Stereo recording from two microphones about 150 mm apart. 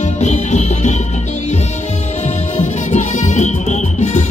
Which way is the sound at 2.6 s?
50° left (ahead or behind).